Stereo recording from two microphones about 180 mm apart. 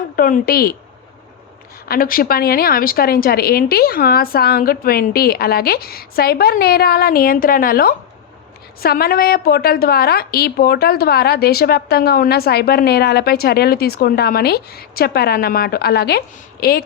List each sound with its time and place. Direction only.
0.2 s a woman's voice: 55° left (ahead or behind)
1.9 s a woman's voice: 50° left (ahead or behind)